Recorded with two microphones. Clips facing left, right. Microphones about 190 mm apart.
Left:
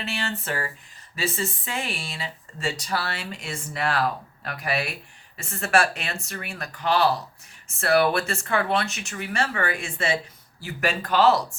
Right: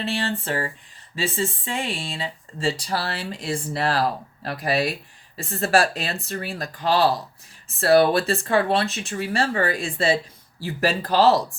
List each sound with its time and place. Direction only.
0.0 s speech: 30° right (ahead or behind)